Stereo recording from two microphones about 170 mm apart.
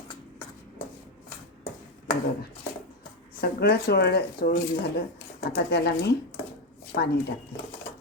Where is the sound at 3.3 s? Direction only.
70° left (ahead or behind).